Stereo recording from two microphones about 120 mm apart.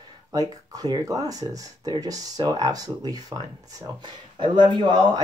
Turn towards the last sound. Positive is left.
turn(degrees=-35)  # may be behind; listen again after turning